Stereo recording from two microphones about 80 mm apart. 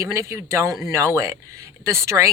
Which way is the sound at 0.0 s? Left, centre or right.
Right.